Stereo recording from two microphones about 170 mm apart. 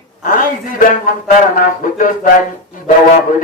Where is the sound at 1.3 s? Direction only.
55° left (ahead or behind).